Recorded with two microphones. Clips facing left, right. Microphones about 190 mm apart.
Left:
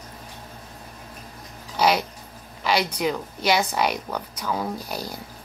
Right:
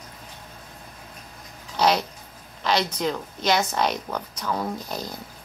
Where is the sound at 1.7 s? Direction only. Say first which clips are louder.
Even; 5° left (ahead or behind).